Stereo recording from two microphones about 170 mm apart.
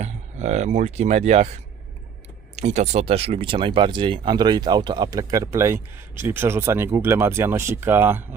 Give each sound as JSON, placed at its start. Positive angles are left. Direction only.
{"t": 0.0, "sound": "speech", "side_deg": -40}
{"t": 2.6, "sound": "speech", "side_deg": -45}